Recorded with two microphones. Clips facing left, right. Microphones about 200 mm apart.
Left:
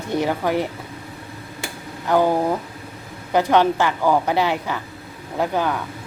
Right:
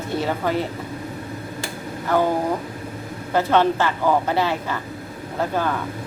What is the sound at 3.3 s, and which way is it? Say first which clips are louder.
A woman's voice: left 1 dB; 15° left (ahead or behind).